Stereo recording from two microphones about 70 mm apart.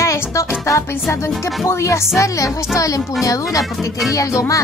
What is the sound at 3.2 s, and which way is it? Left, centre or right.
Music, left.